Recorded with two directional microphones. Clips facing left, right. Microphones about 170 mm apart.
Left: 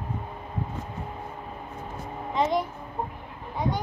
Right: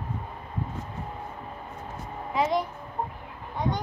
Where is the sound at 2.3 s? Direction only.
Centre (ahead or behind).